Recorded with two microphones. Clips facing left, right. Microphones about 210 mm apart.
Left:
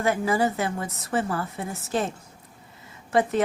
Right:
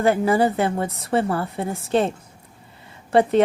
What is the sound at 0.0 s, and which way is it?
A woman's voice, 30° right (ahead or behind).